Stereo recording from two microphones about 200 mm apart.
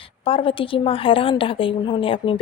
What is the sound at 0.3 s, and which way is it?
Speech, 25° left (ahead or behind).